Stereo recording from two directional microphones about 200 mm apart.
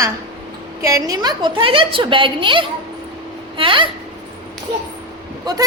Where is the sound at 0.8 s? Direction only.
15° right (ahead or behind).